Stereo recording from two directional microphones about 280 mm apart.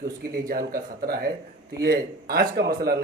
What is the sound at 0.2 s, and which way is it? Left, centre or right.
Speech, right.